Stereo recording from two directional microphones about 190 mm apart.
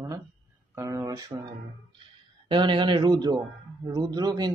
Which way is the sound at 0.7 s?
15° right (ahead or behind).